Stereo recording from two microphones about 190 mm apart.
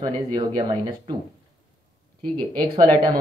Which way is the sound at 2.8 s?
20° right (ahead or behind).